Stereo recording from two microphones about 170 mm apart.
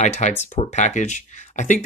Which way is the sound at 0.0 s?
40° left (ahead or behind).